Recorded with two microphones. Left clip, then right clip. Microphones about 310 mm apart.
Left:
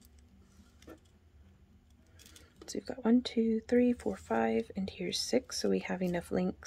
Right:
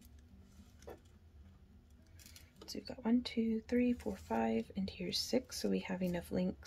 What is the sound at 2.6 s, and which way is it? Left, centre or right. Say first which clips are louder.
Speech: left 7 dB; centre.